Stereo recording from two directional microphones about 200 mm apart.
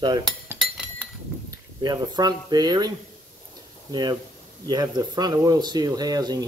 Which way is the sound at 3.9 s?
20° right (ahead or behind).